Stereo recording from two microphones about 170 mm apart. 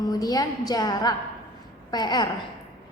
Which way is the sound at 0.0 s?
20° left (ahead or behind).